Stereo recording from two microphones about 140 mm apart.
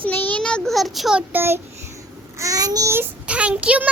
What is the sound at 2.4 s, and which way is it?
Child singing, 25° right (ahead or behind).